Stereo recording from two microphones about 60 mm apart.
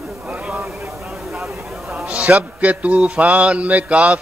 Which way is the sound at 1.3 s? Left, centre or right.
Centre.